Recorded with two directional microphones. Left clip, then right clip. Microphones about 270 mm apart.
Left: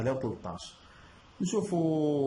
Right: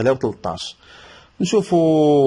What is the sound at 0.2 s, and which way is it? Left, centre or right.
Speech, right.